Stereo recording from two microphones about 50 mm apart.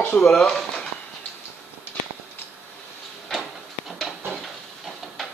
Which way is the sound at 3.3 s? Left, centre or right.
Centre.